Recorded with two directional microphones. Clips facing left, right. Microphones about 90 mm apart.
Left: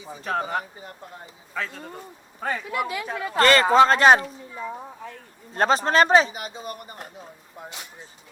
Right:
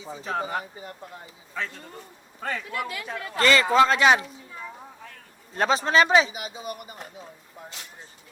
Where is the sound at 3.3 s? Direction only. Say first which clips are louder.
Left 3 dB; 45° left (ahead or behind).